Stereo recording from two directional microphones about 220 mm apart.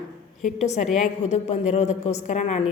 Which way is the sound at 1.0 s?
30° left (ahead or behind).